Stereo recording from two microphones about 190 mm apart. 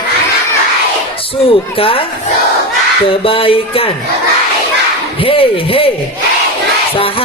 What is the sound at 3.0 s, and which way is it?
Music, 30° left (ahead or behind).